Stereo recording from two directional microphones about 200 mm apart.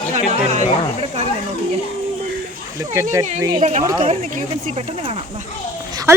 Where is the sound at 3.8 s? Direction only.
25° right (ahead or behind).